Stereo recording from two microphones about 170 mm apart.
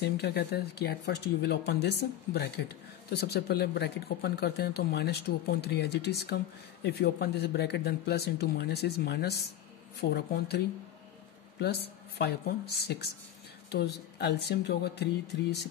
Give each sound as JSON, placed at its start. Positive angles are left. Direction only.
{"t": 0.0, "sound": "speech", "side_deg": 75}
{"t": 11.6, "sound": "a woman's voice", "side_deg": 70}